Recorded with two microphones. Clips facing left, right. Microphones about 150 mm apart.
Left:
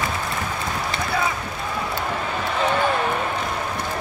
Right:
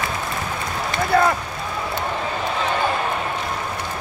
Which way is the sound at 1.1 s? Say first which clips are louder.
Right 8 dB; 60° right (ahead or behind).